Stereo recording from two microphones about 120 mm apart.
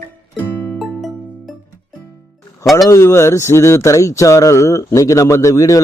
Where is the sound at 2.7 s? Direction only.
25° left (ahead or behind).